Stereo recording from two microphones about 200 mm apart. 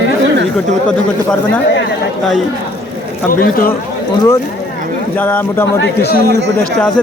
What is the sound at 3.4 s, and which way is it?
Speech, 45° left (ahead or behind).